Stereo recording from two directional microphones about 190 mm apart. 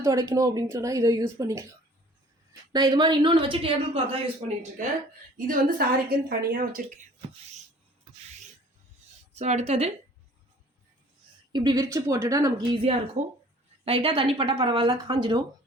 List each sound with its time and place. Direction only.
0.0 s speech: 15° right (ahead or behind)
2.7 s a woman's voice: 20° right (ahead or behind)
5.5 s a woman's voice: 50° right (ahead or behind)
9.3 s speech: 35° right (ahead or behind)
11.5 s a woman's voice: 20° right (ahead or behind)